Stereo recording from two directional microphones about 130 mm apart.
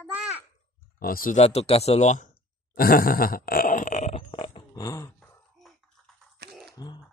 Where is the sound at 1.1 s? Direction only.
90° left.